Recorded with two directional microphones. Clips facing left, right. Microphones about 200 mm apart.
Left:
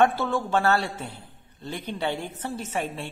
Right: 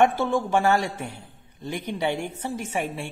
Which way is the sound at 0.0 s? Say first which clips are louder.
Right 1 dB; 15° right (ahead or behind).